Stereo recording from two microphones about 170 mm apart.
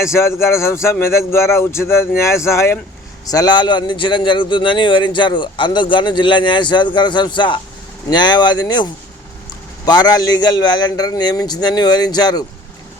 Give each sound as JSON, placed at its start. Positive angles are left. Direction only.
{"t": 0.0, "sound": "speech", "side_deg": 15}